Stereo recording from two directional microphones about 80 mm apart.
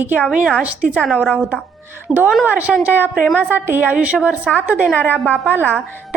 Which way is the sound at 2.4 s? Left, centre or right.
Centre.